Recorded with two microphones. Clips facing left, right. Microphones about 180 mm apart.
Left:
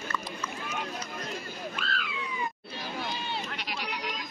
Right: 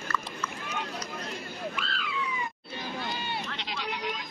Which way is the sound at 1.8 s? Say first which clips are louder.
Left 1 dB; 50° left (ahead or behind).